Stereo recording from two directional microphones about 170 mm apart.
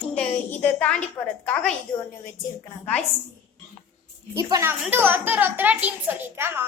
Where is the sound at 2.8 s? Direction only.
10° left (ahead or behind).